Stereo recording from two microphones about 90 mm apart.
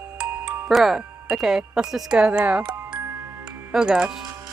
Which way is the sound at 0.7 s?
5° right (ahead or behind).